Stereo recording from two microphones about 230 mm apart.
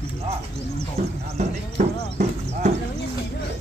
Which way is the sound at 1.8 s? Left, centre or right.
Right.